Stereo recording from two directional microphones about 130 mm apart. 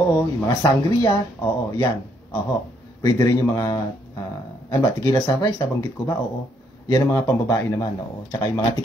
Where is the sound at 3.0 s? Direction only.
25° left (ahead or behind).